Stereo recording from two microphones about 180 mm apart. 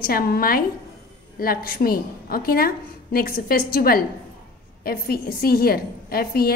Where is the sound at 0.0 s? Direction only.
55° left (ahead or behind).